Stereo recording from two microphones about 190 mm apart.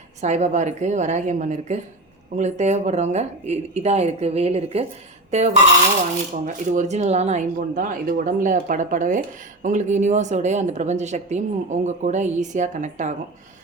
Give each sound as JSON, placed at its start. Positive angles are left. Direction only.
{"t": 0.2, "sound": "speech", "side_deg": -35}
{"t": 6.4, "sound": "speech", "side_deg": -40}